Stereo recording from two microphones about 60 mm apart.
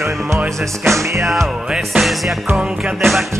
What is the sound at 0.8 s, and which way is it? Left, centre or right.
Music, right.